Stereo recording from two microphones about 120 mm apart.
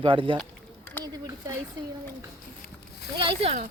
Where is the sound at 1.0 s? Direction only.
30° right (ahead or behind).